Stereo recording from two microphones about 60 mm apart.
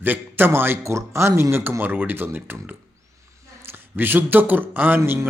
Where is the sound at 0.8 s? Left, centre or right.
Right.